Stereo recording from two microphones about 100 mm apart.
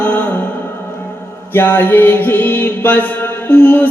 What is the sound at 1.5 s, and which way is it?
Music, 20° left (ahead or behind).